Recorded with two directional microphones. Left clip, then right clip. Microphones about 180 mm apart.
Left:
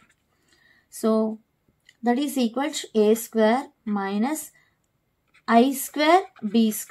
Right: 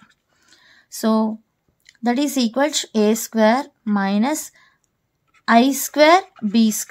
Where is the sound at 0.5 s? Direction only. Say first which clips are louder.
Right 10 dB; 55° right (ahead or behind).